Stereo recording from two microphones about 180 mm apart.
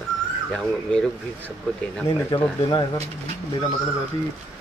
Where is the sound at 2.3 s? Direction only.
25° left (ahead or behind).